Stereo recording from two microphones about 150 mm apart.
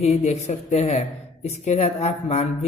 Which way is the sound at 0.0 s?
45° left (ahead or behind).